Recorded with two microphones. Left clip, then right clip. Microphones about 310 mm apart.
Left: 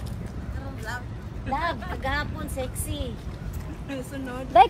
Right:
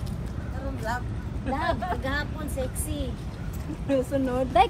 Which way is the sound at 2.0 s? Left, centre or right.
Centre.